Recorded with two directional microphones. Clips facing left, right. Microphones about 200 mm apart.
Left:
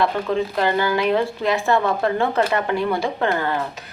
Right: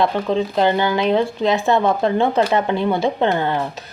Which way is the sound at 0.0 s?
20° right (ahead or behind).